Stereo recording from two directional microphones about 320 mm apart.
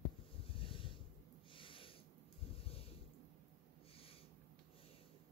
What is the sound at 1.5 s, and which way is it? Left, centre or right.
Snort, centre.